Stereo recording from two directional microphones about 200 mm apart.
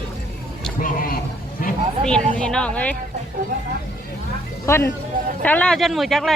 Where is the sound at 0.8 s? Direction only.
45° left (ahead or behind).